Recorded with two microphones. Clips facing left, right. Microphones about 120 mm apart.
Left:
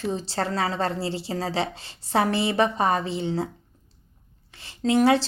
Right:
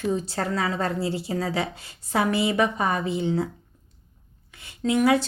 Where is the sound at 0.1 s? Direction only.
30° left (ahead or behind).